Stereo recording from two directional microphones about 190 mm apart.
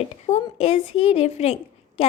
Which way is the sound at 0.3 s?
35° left (ahead or behind).